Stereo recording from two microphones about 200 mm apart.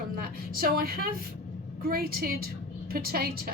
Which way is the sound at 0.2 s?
50° right (ahead or behind).